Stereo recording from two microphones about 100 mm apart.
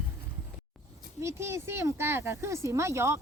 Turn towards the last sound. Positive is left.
turn(degrees=-30)  # may be behind; listen again after turning